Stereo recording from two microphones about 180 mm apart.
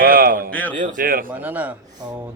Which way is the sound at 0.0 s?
55° right (ahead or behind).